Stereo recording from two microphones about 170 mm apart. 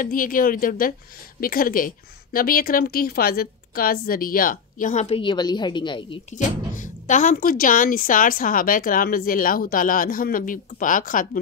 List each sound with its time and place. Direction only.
0.0 s speech: 55° left (ahead or behind); by 6.1 s 30° left (ahead or behind)
6.3 s speech: 50° left (ahead or behind)